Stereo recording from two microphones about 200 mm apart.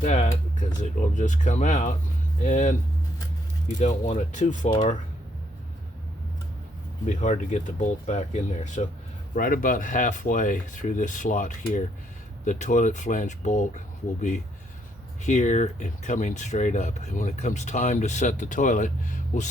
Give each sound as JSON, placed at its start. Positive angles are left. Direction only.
{"t": 0.0, "sound": "speech", "side_deg": 40}
{"t": 3.8, "sound": "speech", "side_deg": 35}
{"t": 7.2, "sound": "speech", "side_deg": 35}
{"t": 15.3, "sound": "speech", "side_deg": 35}